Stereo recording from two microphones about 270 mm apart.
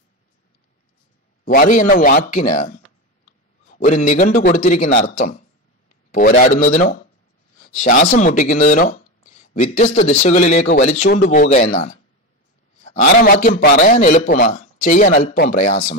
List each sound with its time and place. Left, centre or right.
1.4 s a man's voice: left
12.8 s speech: left